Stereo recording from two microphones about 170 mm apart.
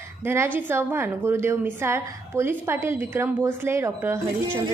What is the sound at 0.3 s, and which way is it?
A woman's voice, 15° right (ahead or behind).